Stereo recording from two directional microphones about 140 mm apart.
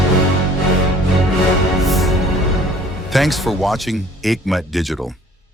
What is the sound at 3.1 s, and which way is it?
Speech, centre (ahead or behind).